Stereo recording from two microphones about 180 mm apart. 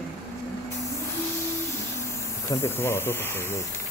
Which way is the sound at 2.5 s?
15° left (ahead or behind).